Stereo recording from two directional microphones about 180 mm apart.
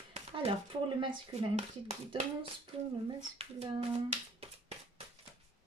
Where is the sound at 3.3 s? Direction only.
35° right (ahead or behind).